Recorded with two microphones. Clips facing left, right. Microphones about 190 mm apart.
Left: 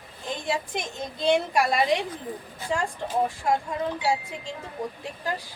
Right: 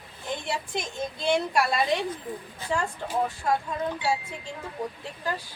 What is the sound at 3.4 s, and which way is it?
Speech, 15° left (ahead or behind).